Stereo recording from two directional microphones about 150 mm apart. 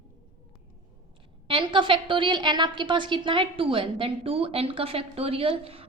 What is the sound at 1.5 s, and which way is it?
A woman's voice, 35° right (ahead or behind).